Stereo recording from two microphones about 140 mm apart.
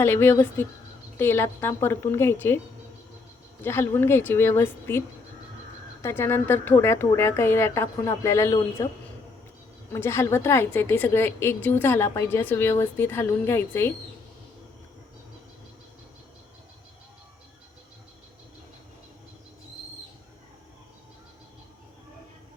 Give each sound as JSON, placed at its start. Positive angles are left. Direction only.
{"t": 0.0, "sound": "a woman's voice", "side_deg": 15}
{"t": 3.6, "sound": "a woman's voice", "side_deg": 15}
{"t": 9.9, "sound": "a woman's voice", "side_deg": 20}